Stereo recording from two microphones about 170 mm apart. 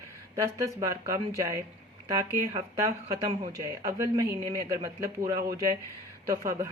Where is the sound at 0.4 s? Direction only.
20° right (ahead or behind).